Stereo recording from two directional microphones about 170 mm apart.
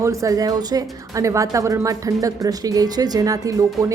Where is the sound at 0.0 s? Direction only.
20° right (ahead or behind).